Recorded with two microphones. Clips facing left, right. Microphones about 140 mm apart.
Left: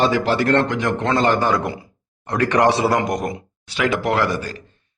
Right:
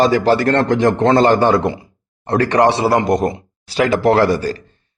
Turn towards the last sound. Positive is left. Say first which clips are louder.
# right 7 dB
turn(degrees=-35)  # may be behind; listen again after turning